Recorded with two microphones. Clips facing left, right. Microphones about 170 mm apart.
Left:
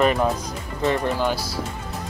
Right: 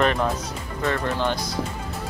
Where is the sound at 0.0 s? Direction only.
10° left (ahead or behind).